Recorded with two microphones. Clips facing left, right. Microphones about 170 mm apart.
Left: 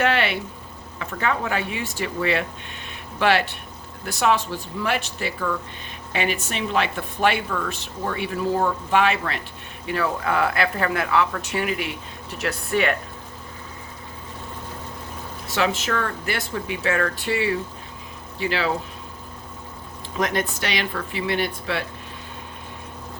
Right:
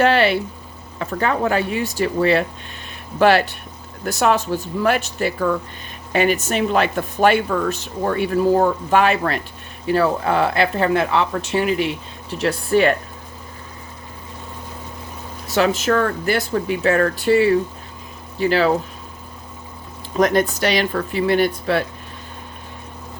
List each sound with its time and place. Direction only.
0.0 s a sound: 35° right (ahead or behind)
0.9 s speech: 40° right (ahead or behind)
15.4 s speech: 40° right (ahead or behind)
20.1 s speech: 40° right (ahead or behind)